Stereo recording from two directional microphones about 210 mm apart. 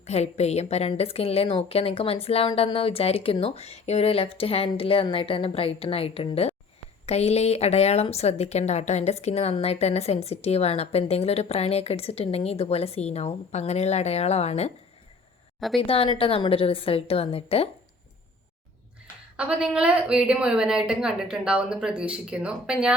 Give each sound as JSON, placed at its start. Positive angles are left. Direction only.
{"t": 0.0, "sound": "a woman's voice", "side_deg": 30}
{"t": 15.8, "sound": "a woman's voice", "side_deg": 25}
{"t": 19.4, "sound": "a woman's voice", "side_deg": -5}